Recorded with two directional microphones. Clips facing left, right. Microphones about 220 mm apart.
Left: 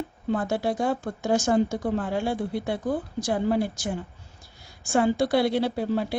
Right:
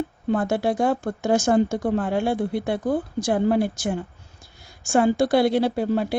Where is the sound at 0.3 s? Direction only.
55° right (ahead or behind).